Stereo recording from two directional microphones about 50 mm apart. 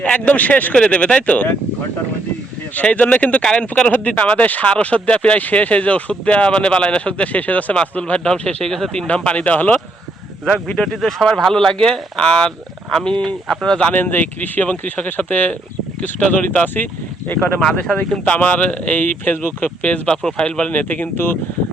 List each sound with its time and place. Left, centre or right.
0.0 s speech: left
2.7 s speech: left
10.4 s speech: centre
10.8 s speech: centre
13.9 s speech: left
17.6 s speech: centre
18.3 s speech: left
20.7 s speech: left